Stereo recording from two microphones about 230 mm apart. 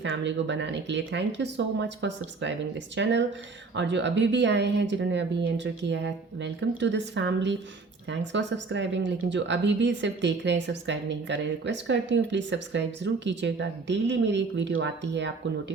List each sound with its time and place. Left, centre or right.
0.0 s a woman's voice: right